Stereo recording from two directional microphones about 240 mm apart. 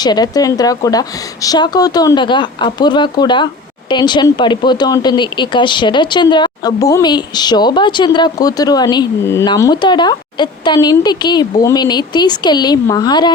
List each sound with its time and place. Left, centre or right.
0.0 s speech: centre